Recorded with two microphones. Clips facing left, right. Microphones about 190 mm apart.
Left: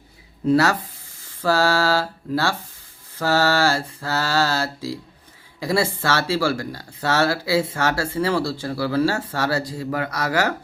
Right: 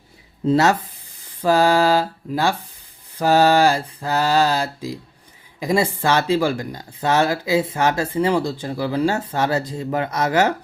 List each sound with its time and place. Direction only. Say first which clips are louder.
0.4 s speech: right 1 dB; 20° right (ahead or behind)